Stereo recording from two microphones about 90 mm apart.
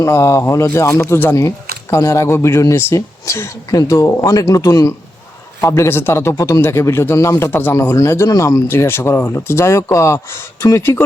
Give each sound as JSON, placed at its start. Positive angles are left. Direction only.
{"t": 0.0, "sound": "speech", "side_deg": 35}
{"t": 1.4, "sound": "speech", "side_deg": 40}